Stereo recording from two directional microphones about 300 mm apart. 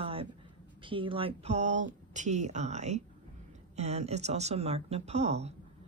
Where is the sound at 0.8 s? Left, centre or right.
Centre.